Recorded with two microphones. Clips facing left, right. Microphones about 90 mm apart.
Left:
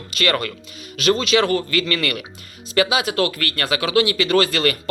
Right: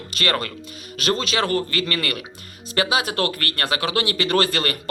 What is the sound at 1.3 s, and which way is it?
A man's voice, 30° right (ahead or behind).